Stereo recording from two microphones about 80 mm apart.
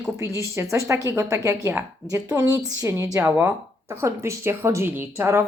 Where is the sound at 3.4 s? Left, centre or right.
Right.